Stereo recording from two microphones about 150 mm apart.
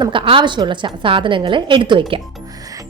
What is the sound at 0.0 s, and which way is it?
A woman's voice, 35° right (ahead or behind).